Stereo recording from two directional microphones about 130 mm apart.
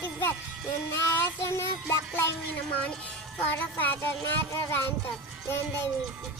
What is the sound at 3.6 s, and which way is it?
Speech, 15° left (ahead or behind).